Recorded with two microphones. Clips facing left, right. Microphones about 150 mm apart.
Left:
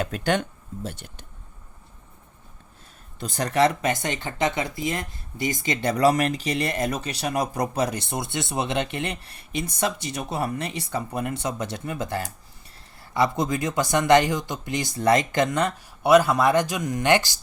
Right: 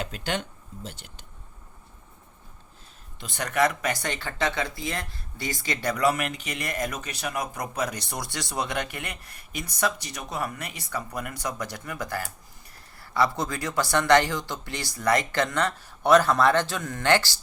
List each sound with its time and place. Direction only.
0.0 s speech: 50° left (ahead or behind)
3.2 s speech: 40° left (ahead or behind); by 17.3 s 15° left (ahead or behind)